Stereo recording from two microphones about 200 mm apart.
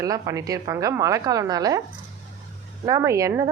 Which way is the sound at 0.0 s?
15° right (ahead or behind).